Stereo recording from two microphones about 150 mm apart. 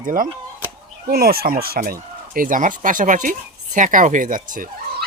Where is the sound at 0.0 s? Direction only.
65° right (ahead or behind).